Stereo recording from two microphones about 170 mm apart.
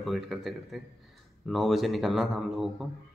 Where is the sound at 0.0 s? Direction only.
Centre (ahead or behind).